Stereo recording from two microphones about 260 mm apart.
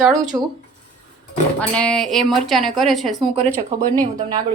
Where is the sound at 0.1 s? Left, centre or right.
Centre.